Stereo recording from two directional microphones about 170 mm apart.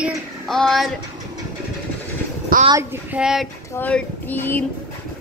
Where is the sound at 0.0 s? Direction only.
Centre (ahead or behind).